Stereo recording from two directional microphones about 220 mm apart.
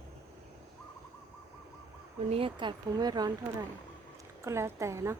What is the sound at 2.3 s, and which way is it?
A woman's voice, 25° right (ahead or behind).